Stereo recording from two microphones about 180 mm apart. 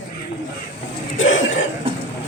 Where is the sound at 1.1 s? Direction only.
90° left.